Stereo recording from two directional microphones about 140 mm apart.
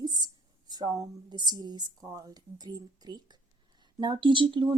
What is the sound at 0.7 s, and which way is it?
Speech, 25° right (ahead or behind).